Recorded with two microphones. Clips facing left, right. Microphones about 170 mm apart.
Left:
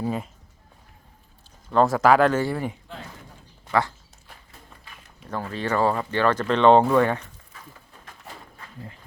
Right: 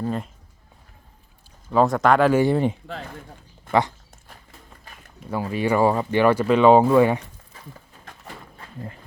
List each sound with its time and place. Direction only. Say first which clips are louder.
0.0 s speech: right 1 dB; 5° left (ahead or behind)
1.7 s speech: even; centre (ahead or behind)
2.3 s speech: right 6 dB; 20° right (ahead or behind)
5.3 s speech: right 4 dB; 10° right (ahead or behind)